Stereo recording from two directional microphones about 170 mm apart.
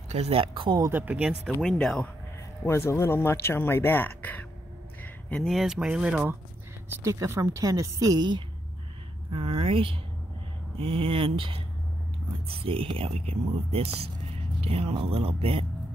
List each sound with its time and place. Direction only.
0.1 s a woman's voice: 35° right (ahead or behind); by 1.5 s 10° right (ahead or behind)
1.5 s speech: 5° left (ahead or behind)
2.9 s speech: 15° left (ahead or behind); by 6.3 s 5° right (ahead or behind)
7.0 s a woman's voice: 15° right (ahead or behind); by 15.6 s 35° right (ahead or behind)